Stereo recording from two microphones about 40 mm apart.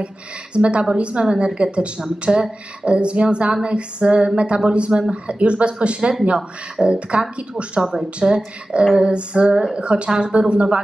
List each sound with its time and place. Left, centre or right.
0.0 s speech: right
8.2 s speech: centre; by 10.8 s right